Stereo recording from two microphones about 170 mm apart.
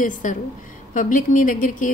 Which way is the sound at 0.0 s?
50° left (ahead or behind).